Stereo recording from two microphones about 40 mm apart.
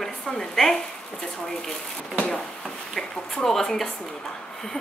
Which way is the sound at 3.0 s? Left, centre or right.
Centre.